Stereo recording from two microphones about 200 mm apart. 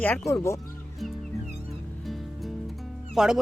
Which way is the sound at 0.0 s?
10° left (ahead or behind).